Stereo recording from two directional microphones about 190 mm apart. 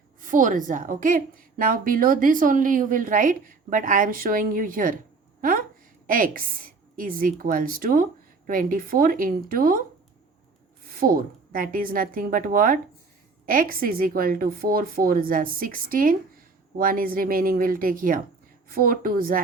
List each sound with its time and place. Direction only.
0.2 s a woman's voice: 45° right (ahead or behind)
10.8 s a woman's voice: 50° right (ahead or behind)